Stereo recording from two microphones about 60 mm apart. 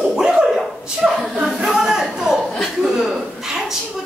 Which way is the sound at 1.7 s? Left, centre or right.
Centre.